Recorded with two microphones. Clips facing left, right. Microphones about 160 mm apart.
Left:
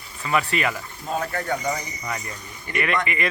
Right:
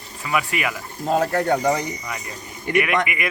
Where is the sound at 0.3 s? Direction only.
10° right (ahead or behind).